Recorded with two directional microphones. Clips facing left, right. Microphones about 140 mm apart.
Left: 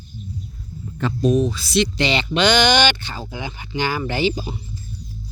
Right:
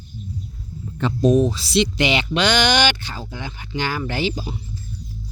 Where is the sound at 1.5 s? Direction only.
30° right (ahead or behind).